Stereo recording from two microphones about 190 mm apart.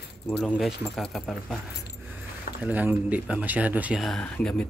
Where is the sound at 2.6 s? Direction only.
10° right (ahead or behind).